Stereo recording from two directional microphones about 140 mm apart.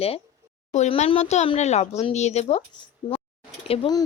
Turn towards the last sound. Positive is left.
turn(degrees=45)  # may be behind; listen again after turning